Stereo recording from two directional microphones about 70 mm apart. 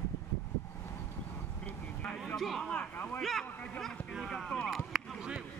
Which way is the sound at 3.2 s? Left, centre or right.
Centre.